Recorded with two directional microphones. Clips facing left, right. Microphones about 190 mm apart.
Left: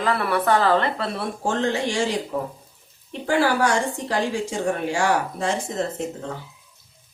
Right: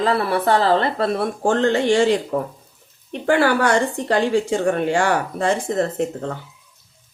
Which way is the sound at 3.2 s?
60° right (ahead or behind).